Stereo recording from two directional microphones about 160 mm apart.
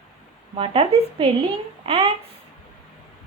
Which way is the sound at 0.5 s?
35° right (ahead or behind).